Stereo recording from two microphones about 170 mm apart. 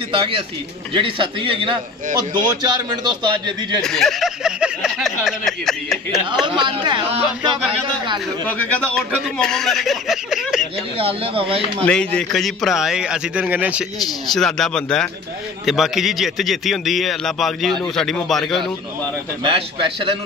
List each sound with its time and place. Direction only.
0.9 s a man's voice: 30° right (ahead or behind)
3.8 s a man's voice: 5° left (ahead or behind)
6.4 s a man's voice: 30° right (ahead or behind)
8.5 s a man's voice: 10° left (ahead or behind)
11.0 s a man's voice: 35° right (ahead or behind)
11.8 s a man's voice: 5° left (ahead or behind)
19.4 s a man's voice: 30° right (ahead or behind)